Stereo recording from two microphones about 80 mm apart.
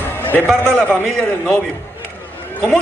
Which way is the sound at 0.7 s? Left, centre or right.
Left.